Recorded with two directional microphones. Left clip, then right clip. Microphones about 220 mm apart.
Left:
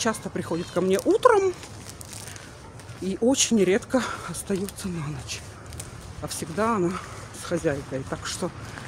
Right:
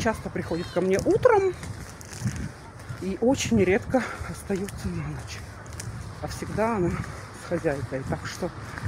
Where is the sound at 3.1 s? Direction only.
20° left (ahead or behind).